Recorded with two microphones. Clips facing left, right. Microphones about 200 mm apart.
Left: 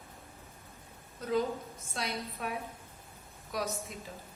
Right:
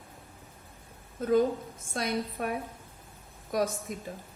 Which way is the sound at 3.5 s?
50° right (ahead or behind).